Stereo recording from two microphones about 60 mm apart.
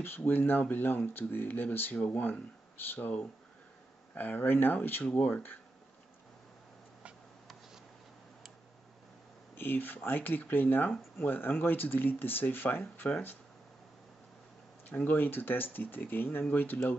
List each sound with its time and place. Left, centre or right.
0.0 s speech: left
4.1 s speech: left
9.6 s speech: left
14.9 s speech: left